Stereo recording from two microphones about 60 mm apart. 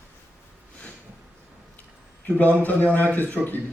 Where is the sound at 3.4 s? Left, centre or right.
Centre.